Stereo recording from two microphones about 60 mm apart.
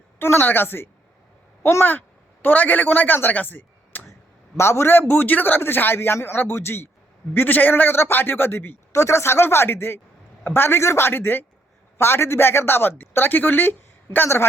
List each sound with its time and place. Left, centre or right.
0.2 s a man's voice: left
4.5 s a man's voice: left
8.9 s a man's voice: left